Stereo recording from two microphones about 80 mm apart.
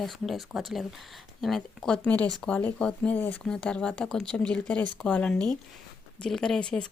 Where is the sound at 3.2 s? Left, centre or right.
Left.